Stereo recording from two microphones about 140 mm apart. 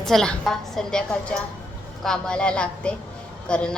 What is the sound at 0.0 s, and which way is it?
A woman's voice, 5° left (ahead or behind).